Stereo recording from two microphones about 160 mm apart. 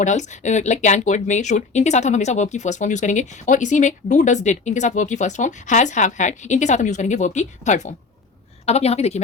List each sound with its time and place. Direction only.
0.0 s a woman's voice: 50° left (ahead or behind)